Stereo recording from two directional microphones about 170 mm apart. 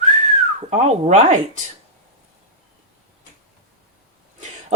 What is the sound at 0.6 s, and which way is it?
Speech, 40° right (ahead or behind).